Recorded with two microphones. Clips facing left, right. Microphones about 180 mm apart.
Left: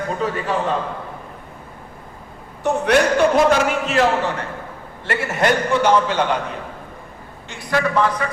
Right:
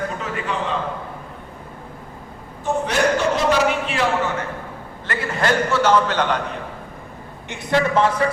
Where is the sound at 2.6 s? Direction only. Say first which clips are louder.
Left 4 dB; 60° left (ahead or behind).